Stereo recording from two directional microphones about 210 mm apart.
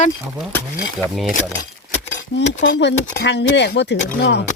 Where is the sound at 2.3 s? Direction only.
55° left (ahead or behind).